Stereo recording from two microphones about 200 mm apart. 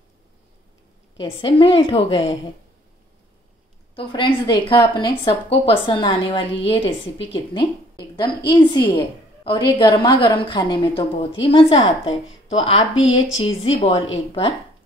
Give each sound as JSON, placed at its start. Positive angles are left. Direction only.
{"t": 1.2, "sound": "a woman's voice", "side_deg": 25}
{"t": 3.9, "sound": "a woman's voice", "side_deg": 20}
{"t": 12.9, "sound": "a woman's voice", "side_deg": 75}
{"t": 13.4, "sound": "a woman's voice", "side_deg": 30}